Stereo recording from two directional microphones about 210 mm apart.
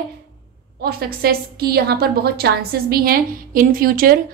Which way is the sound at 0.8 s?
45° right (ahead or behind).